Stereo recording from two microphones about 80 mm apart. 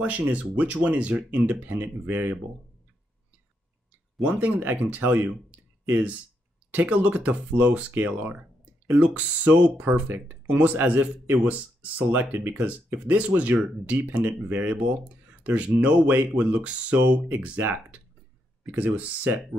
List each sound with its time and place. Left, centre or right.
0.0 s speech: centre
4.2 s speech: centre